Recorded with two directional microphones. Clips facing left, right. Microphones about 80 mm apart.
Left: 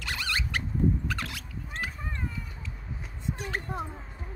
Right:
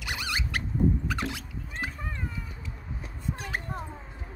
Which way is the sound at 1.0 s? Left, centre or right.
Right.